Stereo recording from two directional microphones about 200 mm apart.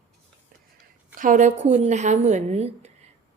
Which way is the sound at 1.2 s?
40° right (ahead or behind).